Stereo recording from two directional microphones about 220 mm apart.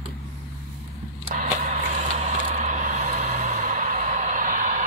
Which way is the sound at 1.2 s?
35° right (ahead or behind).